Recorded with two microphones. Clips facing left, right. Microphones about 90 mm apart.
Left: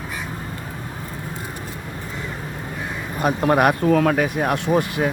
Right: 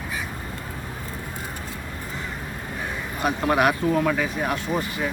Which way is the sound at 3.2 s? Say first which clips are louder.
Left 4 dB; 40° left (ahead or behind).